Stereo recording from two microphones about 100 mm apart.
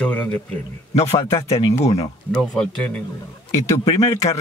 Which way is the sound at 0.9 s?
90° left.